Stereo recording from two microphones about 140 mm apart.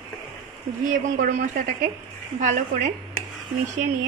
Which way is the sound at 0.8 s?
70° right (ahead or behind).